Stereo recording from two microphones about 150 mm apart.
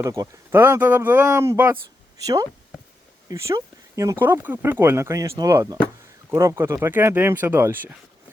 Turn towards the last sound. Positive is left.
turn(degrees=-15)  # may be behind; listen again after turning